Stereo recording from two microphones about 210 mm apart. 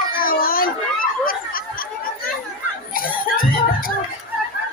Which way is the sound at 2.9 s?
40° left (ahead or behind).